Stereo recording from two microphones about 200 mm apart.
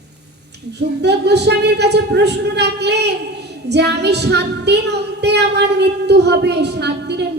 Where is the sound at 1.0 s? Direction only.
55° right (ahead or behind).